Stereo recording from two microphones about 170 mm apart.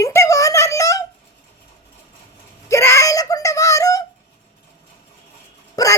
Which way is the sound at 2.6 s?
15° left (ahead or behind).